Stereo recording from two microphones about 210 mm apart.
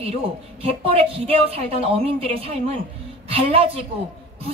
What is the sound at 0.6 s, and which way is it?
A woman's voice, 30° right (ahead or behind).